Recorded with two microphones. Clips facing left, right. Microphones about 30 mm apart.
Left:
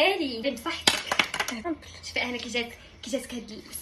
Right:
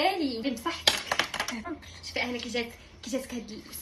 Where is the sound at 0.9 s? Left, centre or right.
Left.